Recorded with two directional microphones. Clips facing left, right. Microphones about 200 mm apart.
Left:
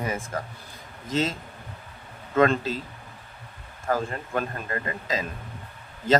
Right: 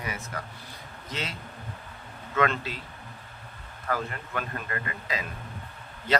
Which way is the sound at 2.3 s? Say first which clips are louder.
Left 6 dB; 30° left (ahead or behind).